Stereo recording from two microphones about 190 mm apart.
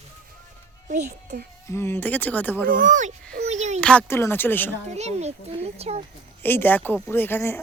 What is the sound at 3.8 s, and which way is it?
Speech, 5° left (ahead or behind).